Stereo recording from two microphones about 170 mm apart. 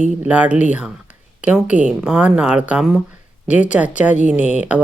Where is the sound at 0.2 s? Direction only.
10° right (ahead or behind).